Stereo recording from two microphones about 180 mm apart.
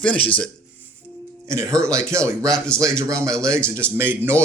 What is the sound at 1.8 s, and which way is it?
Speech, 15° right (ahead or behind).